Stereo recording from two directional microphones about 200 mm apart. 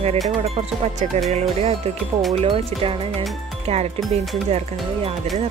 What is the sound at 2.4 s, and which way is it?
Speech, 30° right (ahead or behind).